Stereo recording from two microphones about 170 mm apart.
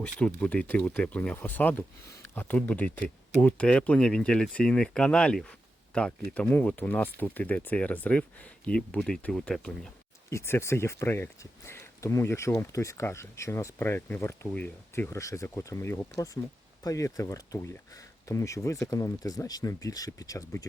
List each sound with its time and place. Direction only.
0.0 s speech: 10° left (ahead or behind)
10.2 s speech: 15° left (ahead or behind)